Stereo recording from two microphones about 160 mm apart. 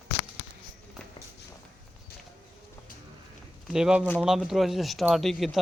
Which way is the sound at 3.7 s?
5° right (ahead or behind).